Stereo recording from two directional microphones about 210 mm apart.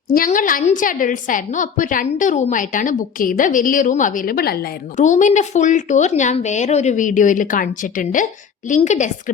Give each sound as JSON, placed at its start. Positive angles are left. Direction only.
{"t": 0.1, "sound": "a woman's voice", "side_deg": 40}